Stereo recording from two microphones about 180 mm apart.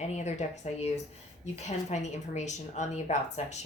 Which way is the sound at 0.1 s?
40° left (ahead or behind).